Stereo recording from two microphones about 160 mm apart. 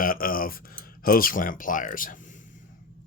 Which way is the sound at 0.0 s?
60° left (ahead or behind).